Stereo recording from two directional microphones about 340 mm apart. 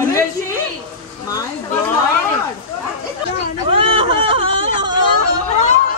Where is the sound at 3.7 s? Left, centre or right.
Centre.